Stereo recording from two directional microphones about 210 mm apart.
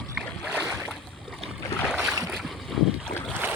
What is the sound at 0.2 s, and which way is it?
Boat, 5° right (ahead or behind).